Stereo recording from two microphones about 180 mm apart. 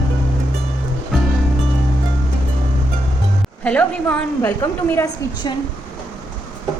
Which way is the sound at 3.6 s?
5° left (ahead or behind).